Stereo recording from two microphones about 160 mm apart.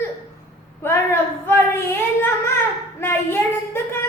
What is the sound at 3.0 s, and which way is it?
Speech, 15° left (ahead or behind).